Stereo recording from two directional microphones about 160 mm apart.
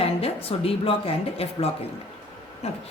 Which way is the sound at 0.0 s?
35° left (ahead or behind).